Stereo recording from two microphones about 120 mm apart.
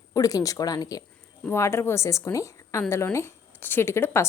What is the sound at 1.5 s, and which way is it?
Speech, 20° left (ahead or behind).